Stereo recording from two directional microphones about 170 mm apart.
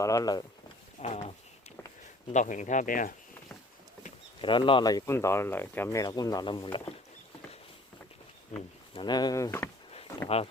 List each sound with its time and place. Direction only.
0.0 s speech: 20° left (ahead or behind)
1.0 s speech: 45° left (ahead or behind)
2.3 s speech: 45° left (ahead or behind)
4.4 s speech: 30° left (ahead or behind)
8.9 s speech: 25° left (ahead or behind)
10.2 s speech: 35° left (ahead or behind)